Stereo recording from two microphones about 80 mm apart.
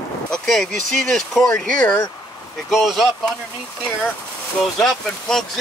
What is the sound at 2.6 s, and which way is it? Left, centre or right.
Speech, centre.